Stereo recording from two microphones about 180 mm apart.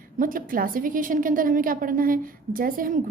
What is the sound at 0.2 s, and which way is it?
A woman's voice, 50° right (ahead or behind).